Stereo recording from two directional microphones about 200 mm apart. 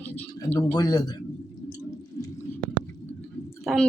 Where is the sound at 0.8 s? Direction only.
20° left (ahead or behind).